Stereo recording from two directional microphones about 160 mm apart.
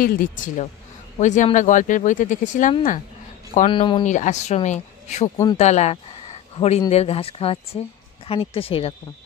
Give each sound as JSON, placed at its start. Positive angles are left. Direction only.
{"t": 0.0, "sound": "speech", "side_deg": 60}
{"t": 3.6, "sound": "speech", "side_deg": 30}
{"t": 4.0, "sound": "speech", "side_deg": 50}